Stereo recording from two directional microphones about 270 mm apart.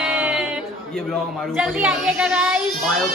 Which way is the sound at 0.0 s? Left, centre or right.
Centre.